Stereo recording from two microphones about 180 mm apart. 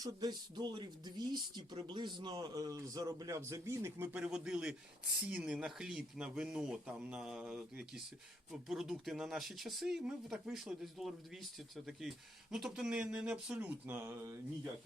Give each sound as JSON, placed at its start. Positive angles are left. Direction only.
{"t": 0.0, "sound": "speech", "side_deg": -20}